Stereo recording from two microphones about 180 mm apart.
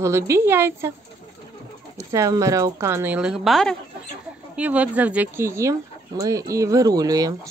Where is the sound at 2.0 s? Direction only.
15° right (ahead or behind).